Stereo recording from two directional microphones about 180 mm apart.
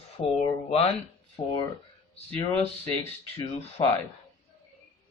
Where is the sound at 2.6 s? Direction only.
15° left (ahead or behind).